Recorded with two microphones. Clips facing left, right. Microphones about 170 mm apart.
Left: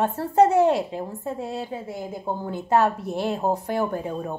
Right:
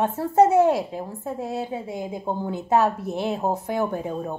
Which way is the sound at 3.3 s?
Centre (ahead or behind).